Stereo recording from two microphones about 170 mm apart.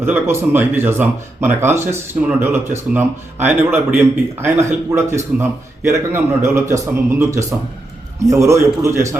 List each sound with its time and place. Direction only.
0.0 s a man's voice: 15° right (ahead or behind)